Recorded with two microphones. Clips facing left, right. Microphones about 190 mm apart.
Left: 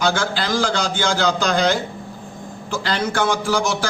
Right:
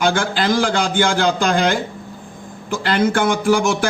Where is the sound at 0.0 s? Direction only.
50° right (ahead or behind).